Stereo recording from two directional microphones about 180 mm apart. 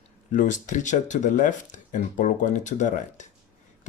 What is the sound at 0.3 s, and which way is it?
Speech, 45° left (ahead or behind).